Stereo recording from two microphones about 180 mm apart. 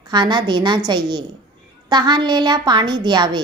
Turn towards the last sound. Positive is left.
turn(degrees=-25)  # may be behind; listen again after turning